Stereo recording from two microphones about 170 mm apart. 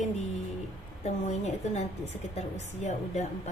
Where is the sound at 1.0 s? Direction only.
40° left (ahead or behind).